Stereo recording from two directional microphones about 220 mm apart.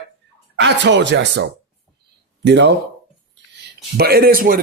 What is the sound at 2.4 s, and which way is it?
Speech, 50° right (ahead or behind).